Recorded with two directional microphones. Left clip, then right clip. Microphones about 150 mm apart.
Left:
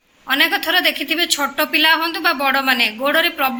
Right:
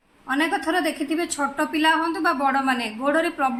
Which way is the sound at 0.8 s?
5° right (ahead or behind).